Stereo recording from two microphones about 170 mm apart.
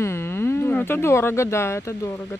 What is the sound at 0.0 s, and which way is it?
Speech, 15° left (ahead or behind).